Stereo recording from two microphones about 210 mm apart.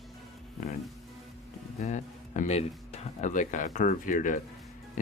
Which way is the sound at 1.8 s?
35° left (ahead or behind).